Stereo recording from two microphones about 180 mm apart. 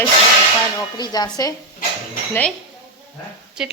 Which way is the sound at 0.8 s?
20° left (ahead or behind).